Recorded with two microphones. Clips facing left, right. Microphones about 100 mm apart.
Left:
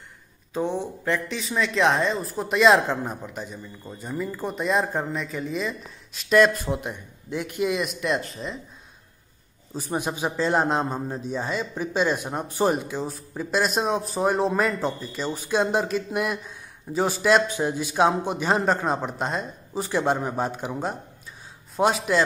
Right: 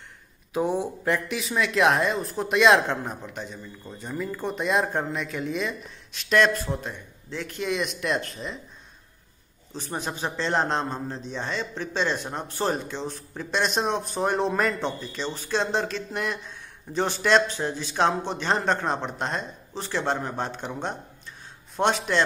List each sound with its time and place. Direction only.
0.5 s a man's voice: 10° right (ahead or behind)
1.4 s speech: centre (ahead or behind)
6.6 s speech: 15° left (ahead or behind); by 8.5 s centre (ahead or behind)
9.8 s a man's voice: 10° left (ahead or behind)